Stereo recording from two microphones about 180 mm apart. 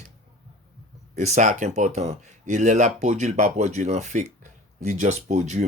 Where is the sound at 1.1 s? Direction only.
40° right (ahead or behind).